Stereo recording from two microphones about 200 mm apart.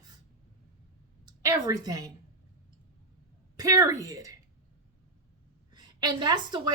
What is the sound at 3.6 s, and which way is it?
Speech, 20° right (ahead or behind).